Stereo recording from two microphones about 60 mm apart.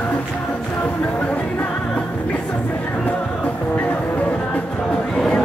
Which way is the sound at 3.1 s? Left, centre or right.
Left.